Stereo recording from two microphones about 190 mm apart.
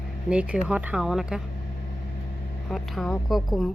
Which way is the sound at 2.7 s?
Centre (ahead or behind).